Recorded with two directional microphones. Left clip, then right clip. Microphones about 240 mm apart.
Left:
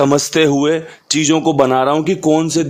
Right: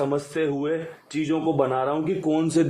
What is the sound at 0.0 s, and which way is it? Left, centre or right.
A man's voice, left.